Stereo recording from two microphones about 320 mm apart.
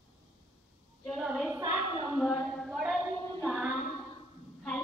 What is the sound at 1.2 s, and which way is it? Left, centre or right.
Child singing, centre.